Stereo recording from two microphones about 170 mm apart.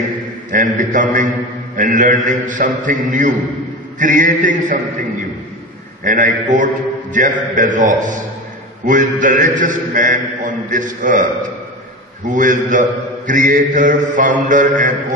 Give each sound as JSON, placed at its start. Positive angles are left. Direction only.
{"t": 0.5, "sound": "a man's voice", "side_deg": -50}
{"t": 6.0, "sound": "a man's voice", "side_deg": -50}